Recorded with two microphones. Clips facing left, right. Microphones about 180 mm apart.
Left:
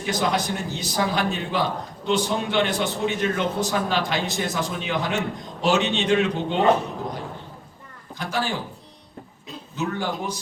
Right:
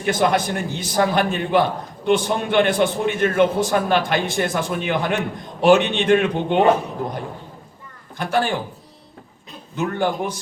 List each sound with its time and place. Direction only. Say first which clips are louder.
0.0 s a man's voice: right 5 dB; 55° right (ahead or behind)
8.2 s a man's voice: right 6 dB; 55° right (ahead or behind)
9.7 s a man's voice: right 5 dB; 55° right (ahead or behind)